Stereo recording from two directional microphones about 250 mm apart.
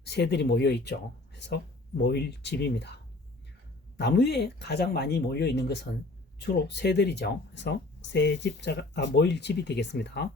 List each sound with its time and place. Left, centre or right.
0.0 s speech: left